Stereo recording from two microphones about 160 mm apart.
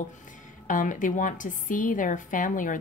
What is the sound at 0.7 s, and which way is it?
A woman's voice, 55° left (ahead or behind).